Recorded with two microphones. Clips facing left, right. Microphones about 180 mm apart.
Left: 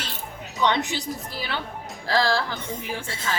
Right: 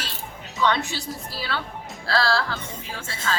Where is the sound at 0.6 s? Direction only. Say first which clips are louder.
Even; 20° left (ahead or behind).